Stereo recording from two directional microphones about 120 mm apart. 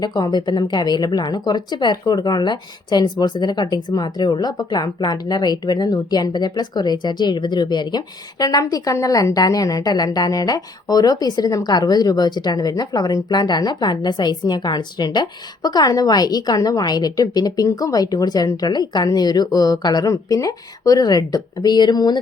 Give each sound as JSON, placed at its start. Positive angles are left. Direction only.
{"t": 0.0, "sound": "a woman's voice", "side_deg": 35}